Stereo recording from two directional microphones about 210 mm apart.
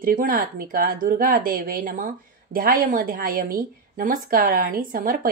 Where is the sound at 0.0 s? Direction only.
40° right (ahead or behind).